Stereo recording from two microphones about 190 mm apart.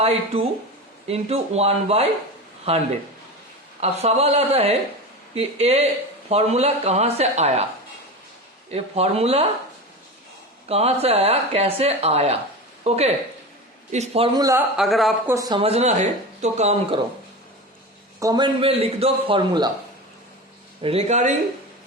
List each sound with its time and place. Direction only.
1.0 s speech: 35° right (ahead or behind)
8.7 s speech: 30° right (ahead or behind)
10.7 s speech: 30° right (ahead or behind)
14.3 s a man's voice: 20° right (ahead or behind)
14.8 s speech: centre (ahead or behind)
15.3 s speech: 20° right (ahead or behind); by 17.0 s 35° right (ahead or behind)
18.2 s a man's voice: 20° right (ahead or behind)
20.8 s speech: 35° right (ahead or behind)